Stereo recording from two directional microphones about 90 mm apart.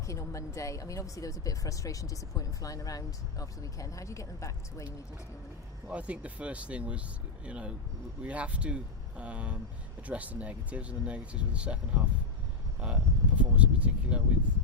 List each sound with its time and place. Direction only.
0.1 s speech: 35° left (ahead or behind)
5.9 s speech: 15° right (ahead or behind)